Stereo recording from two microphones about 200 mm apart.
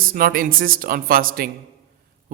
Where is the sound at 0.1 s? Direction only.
45° right (ahead or behind).